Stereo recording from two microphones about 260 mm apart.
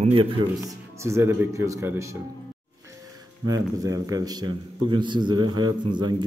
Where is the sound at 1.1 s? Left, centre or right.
Centre.